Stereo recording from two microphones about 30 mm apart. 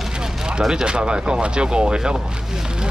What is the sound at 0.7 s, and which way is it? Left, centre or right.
Speech, right.